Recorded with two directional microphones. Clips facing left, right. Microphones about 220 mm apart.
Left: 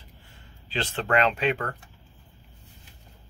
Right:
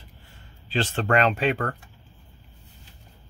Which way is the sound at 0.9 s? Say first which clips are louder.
Right 1 dB; 45° right (ahead or behind).